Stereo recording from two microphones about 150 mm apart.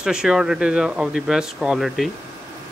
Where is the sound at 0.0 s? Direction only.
5° right (ahead or behind).